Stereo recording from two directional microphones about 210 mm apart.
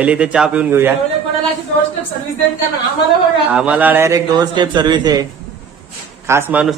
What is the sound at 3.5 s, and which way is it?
A man's voice, 5° right (ahead or behind).